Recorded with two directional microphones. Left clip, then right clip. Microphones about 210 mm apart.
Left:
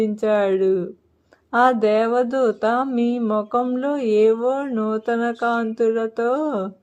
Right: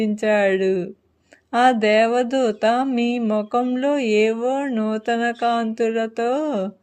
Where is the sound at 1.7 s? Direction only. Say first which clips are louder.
Right 1 dB; 25° right (ahead or behind).